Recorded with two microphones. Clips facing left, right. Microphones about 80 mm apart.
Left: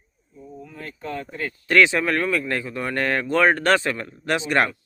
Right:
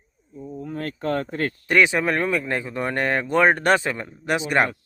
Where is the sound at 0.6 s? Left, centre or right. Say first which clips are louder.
Right 9 dB; right.